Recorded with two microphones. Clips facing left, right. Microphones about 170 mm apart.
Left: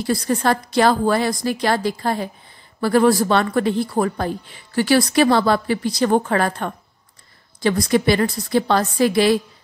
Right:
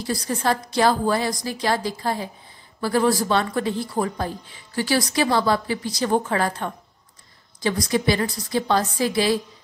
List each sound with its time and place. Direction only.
0.0 s a woman's voice: 60° left (ahead or behind)